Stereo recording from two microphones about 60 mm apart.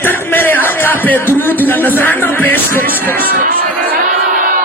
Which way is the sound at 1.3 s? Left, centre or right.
Left.